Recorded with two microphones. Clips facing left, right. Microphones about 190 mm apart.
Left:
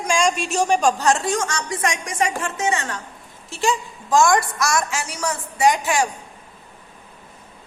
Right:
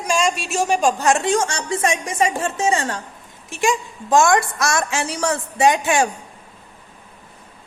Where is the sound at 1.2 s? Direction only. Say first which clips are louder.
Right 3 dB; 30° right (ahead or behind).